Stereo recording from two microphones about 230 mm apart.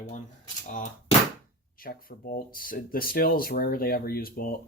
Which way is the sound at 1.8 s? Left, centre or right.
Left.